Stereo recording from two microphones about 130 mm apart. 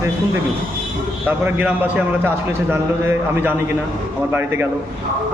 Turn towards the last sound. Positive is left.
turn(degrees=-15)  # may be behind; listen again after turning